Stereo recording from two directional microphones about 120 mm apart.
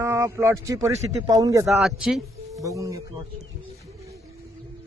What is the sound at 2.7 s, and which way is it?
Speech, 25° right (ahead or behind).